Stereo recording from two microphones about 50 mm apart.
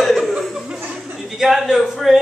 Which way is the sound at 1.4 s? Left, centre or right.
Centre.